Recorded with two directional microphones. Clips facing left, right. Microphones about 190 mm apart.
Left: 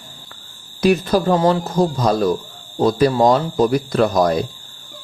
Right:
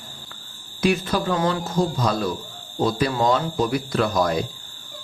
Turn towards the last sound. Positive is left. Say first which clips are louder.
# left 5 dB
turn(degrees=40)  # may be behind; listen again after turning